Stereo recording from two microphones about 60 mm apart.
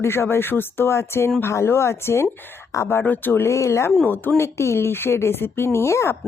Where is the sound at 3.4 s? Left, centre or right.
Left.